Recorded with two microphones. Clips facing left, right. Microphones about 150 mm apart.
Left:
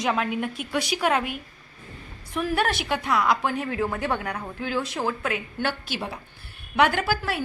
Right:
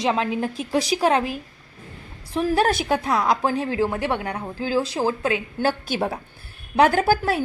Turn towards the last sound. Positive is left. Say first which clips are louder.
# right 6 dB
turn(degrees=-45)  # may be behind; listen again after turning